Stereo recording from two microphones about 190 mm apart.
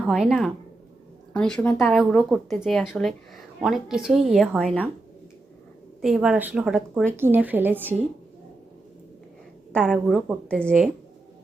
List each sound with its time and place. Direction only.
0.1 s speech: centre (ahead or behind)
6.0 s a woman's voice: 5° right (ahead or behind)
9.7 s speech: 5° left (ahead or behind)